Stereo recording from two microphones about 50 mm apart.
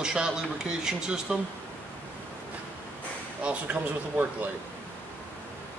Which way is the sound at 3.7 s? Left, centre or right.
Right.